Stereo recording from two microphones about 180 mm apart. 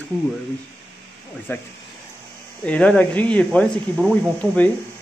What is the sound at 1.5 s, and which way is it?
Speech, 15° left (ahead or behind).